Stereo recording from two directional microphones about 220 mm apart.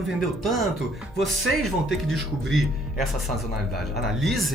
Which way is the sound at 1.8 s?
Centre (ahead or behind).